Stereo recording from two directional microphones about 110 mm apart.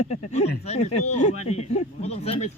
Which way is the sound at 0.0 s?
90° left.